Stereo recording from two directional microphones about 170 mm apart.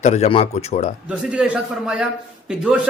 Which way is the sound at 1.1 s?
5° right (ahead or behind).